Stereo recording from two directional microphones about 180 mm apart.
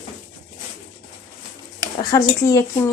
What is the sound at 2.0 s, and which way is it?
Speech, 20° left (ahead or behind).